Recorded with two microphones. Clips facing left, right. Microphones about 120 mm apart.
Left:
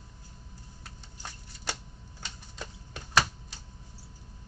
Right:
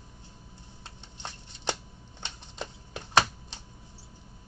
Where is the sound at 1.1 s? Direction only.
25° right (ahead or behind).